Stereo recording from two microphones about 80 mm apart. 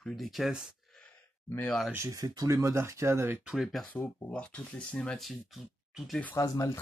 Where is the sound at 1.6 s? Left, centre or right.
Centre.